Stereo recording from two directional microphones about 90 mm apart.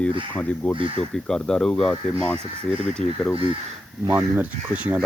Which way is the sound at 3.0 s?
90° right.